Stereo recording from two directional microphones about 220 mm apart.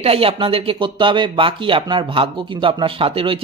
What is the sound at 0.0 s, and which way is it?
Speech, 25° right (ahead or behind).